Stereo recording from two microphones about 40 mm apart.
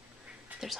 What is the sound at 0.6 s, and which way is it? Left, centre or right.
Speech, centre.